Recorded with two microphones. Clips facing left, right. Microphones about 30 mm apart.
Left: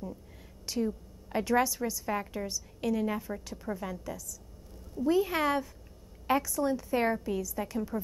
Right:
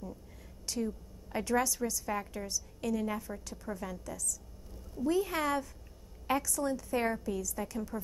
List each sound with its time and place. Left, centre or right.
0.7 s a woman's voice: centre